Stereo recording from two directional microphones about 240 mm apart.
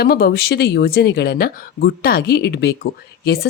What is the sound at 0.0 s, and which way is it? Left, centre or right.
Speech, left.